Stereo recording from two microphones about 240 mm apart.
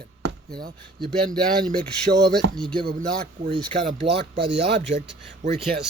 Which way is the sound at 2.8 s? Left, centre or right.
Right.